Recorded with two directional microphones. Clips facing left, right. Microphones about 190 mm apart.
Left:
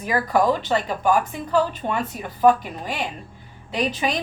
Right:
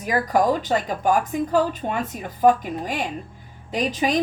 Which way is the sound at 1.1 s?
45° right (ahead or behind).